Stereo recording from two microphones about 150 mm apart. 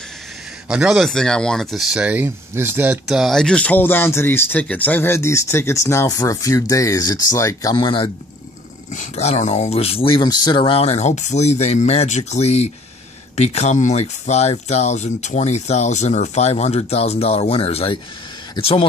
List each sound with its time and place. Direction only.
0.7 s speech: 5° right (ahead or behind); by 7.7 s 20° left (ahead or behind)
7.7 s speech: 35° left (ahead or behind)
8.9 s speech: 50° left (ahead or behind)